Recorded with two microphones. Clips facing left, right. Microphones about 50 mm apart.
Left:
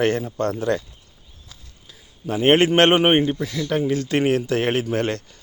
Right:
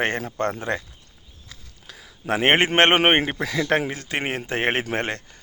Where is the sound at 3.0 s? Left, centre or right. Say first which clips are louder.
Left 2 dB; right.